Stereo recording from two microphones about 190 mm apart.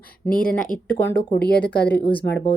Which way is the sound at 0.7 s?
25° right (ahead or behind).